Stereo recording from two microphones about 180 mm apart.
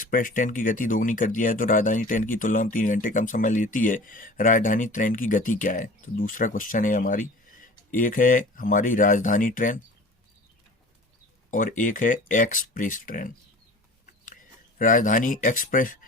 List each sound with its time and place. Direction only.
0.0 s speech: 50° left (ahead or behind)
11.5 s speech: 45° left (ahead or behind)
14.8 s speech: 45° left (ahead or behind)